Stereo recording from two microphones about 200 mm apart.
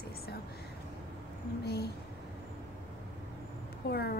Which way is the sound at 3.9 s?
50° left (ahead or behind).